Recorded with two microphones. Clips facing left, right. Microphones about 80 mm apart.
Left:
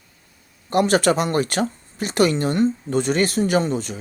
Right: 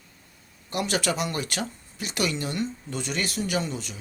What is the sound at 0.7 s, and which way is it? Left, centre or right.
Speech, left.